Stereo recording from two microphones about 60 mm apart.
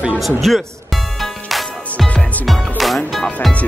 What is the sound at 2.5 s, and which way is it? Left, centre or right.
Music, centre.